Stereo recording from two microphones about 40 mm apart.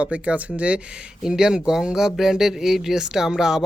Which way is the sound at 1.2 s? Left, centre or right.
Centre.